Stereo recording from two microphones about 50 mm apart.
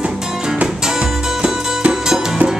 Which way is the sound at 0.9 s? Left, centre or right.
Centre.